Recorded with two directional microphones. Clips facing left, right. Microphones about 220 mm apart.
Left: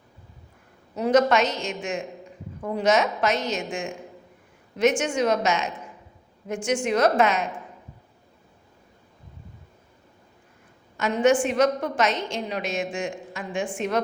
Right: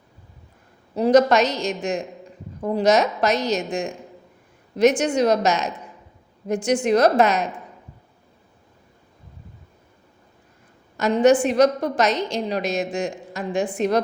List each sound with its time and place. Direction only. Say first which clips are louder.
0.9 s a woman's voice: right 4 dB; 35° right (ahead or behind)
10.9 s a woman's voice: right 4 dB; 40° right (ahead or behind)